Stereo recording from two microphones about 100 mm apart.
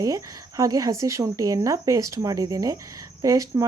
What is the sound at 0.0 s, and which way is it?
Speech, 35° right (ahead or behind).